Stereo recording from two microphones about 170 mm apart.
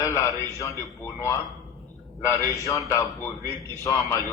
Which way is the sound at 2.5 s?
15° left (ahead or behind).